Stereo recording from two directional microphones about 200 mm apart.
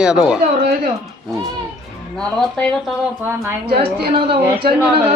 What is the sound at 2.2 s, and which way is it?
Speech, 5° left (ahead or behind).